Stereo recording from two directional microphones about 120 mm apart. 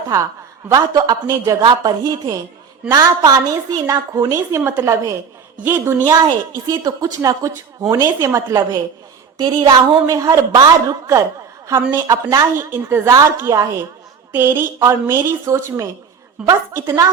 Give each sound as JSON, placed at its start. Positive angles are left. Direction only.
{"t": 0.7, "sound": "a woman's voice", "side_deg": -30}
{"t": 4.4, "sound": "a woman's voice", "side_deg": -20}
{"t": 6.5, "sound": "a woman's voice", "side_deg": -30}
{"t": 9.4, "sound": "a woman's voice", "side_deg": -40}